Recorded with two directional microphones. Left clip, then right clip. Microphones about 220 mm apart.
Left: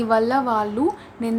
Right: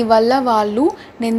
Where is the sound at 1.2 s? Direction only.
15° right (ahead or behind).